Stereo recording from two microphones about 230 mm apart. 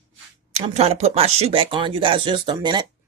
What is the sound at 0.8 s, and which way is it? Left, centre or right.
Speech, right.